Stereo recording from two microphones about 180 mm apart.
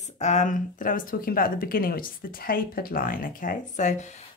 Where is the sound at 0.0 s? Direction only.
40° left (ahead or behind).